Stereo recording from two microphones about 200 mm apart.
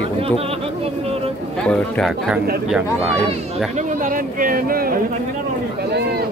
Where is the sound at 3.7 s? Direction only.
40° right (ahead or behind).